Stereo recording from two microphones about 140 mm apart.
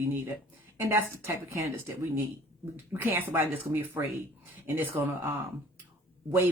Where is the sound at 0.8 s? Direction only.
15° right (ahead or behind).